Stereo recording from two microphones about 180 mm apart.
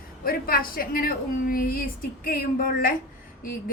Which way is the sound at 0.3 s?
55° left (ahead or behind).